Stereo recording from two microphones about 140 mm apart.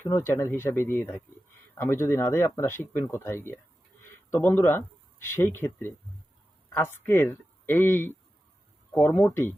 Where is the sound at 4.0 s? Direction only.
15° left (ahead or behind).